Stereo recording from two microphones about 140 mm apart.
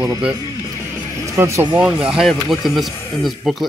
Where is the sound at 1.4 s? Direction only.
15° right (ahead or behind).